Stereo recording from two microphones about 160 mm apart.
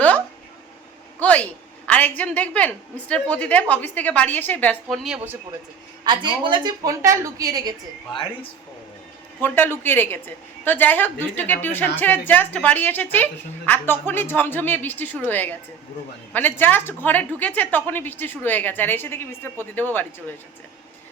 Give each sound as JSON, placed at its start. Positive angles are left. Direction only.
{"t": 1.2, "sound": "a sound", "side_deg": 10}
{"t": 1.9, "sound": "a woman's voice", "side_deg": 10}
{"t": 5.0, "sound": "speech", "side_deg": -10}
{"t": 6.1, "sound": "a woman's voice", "side_deg": -30}
{"t": 8.1, "sound": "speech", "side_deg": 30}
{"t": 9.4, "sound": "a woman's voice", "side_deg": 15}